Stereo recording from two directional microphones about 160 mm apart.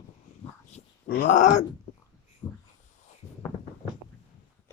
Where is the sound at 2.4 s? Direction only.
20° left (ahead or behind).